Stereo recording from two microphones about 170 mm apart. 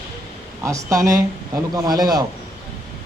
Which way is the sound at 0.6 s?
20° right (ahead or behind).